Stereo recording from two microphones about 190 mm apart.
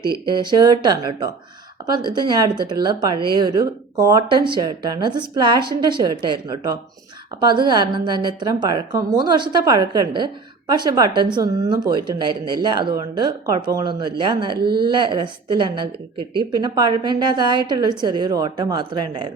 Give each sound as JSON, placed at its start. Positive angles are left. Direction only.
{"t": 0.3, "sound": "a woman's voice", "side_deg": -25}